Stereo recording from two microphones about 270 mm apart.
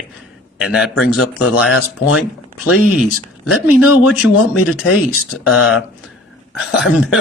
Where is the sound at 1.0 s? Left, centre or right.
Left.